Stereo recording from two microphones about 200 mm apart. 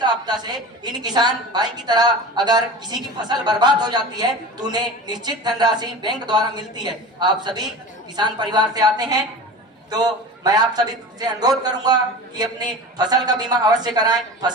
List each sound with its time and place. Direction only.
0.0 s a woman's voice: 20° right (ahead or behind)